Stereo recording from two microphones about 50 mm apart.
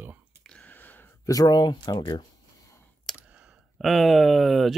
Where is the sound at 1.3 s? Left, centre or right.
Left.